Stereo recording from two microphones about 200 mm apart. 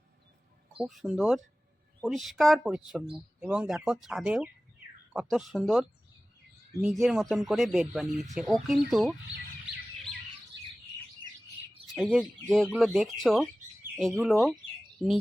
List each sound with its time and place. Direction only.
0.8 s speech: centre (ahead or behind)
11.9 s speech: 5° right (ahead or behind)